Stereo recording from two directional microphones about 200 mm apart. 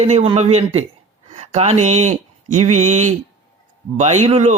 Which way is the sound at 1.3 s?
35° right (ahead or behind).